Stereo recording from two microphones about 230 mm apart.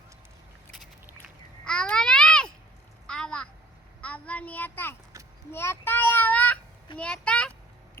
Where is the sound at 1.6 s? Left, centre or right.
Centre.